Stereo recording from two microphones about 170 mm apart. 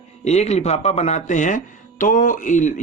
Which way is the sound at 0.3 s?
40° left (ahead or behind).